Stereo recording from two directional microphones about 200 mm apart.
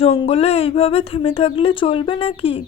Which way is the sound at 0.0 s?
30° left (ahead or behind).